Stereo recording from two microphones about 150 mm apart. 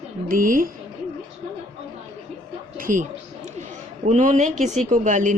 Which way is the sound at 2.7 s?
65° right (ahead or behind).